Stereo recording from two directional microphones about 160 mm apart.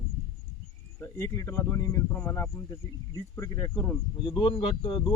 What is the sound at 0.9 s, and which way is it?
Speech, 20° left (ahead or behind).